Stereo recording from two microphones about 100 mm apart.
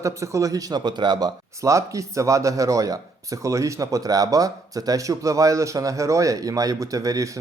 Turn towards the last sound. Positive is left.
turn(degrees=-35)  # may be behind; listen again after turning